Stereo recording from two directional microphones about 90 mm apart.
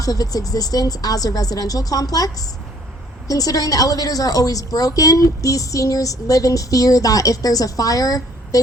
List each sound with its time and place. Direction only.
0.0 s a woman's voice: 40° left (ahead or behind)